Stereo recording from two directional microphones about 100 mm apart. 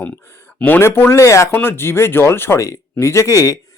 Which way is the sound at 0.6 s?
20° left (ahead or behind).